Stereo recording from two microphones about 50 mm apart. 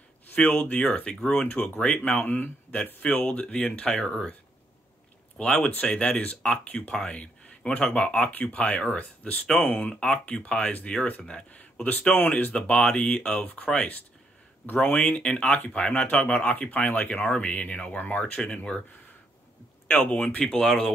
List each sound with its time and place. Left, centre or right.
0.3 s speech: left
1.5 s speech: left
2.8 s speech: left
5.4 s speech: centre
19.9 s speech: left
20.6 s speech: centre